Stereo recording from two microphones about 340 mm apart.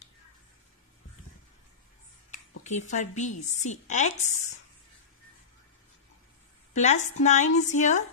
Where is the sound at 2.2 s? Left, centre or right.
Left.